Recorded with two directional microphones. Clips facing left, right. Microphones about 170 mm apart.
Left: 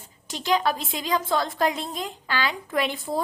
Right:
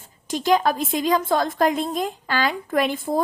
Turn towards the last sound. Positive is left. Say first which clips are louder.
# right 4 dB
turn(degrees=-50)  # may be behind; listen again after turning